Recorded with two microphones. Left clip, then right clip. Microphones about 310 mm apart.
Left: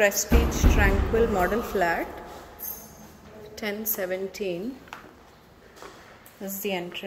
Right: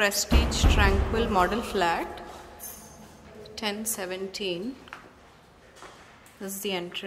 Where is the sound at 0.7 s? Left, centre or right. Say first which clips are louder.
Left 3 dB; centre.